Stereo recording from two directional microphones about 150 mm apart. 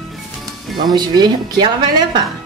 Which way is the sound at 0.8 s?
25° right (ahead or behind).